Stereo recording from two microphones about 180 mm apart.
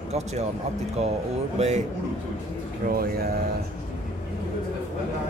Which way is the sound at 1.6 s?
40° right (ahead or behind).